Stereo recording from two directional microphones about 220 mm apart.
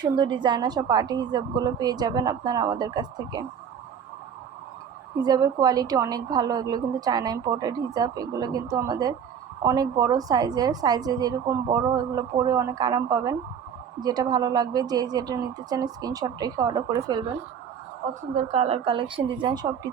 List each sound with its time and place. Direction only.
0.0 s a woman's voice: 20° right (ahead or behind)
5.2 s a woman's voice: 15° right (ahead or behind)
18.1 s a woman's voice: 30° right (ahead or behind)